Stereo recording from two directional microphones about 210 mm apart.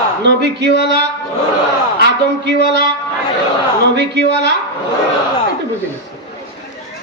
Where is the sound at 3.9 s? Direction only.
55° right (ahead or behind).